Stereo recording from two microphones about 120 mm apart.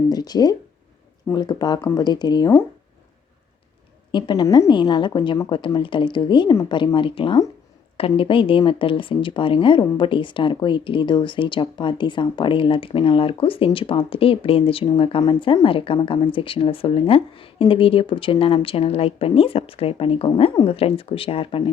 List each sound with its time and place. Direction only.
0.1 s speech: 35° left (ahead or behind)
4.1 s speech: 40° left (ahead or behind)
4.4 s a woman's voice: 25° left (ahead or behind)
4.7 s speech: 40° left (ahead or behind)